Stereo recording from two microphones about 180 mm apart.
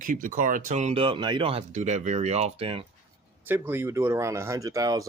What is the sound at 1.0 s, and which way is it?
Speech, 25° right (ahead or behind).